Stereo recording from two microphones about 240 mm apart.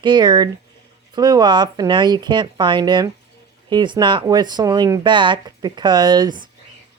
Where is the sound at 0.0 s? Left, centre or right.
Centre.